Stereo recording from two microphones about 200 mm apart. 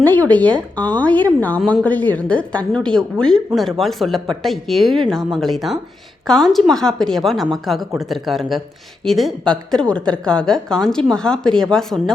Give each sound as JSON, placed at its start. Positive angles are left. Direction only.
{"t": 0.0, "sound": "a woman's voice", "side_deg": 10}